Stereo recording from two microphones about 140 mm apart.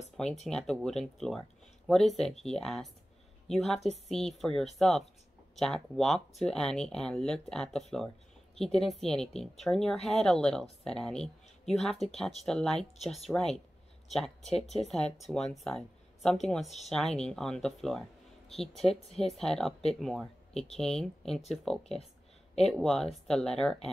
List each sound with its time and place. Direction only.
0.2 s speech: 5° left (ahead or behind)
16.6 s speech: 50° left (ahead or behind)
16.9 s speech: 5° left (ahead or behind)